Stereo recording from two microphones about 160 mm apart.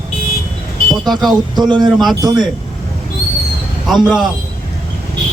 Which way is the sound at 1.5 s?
25° right (ahead or behind).